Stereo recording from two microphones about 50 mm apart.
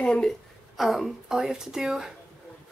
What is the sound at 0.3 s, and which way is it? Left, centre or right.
A woman's voice, centre.